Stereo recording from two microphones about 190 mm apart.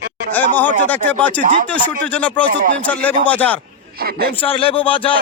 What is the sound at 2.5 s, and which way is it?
Speech, 45° right (ahead or behind).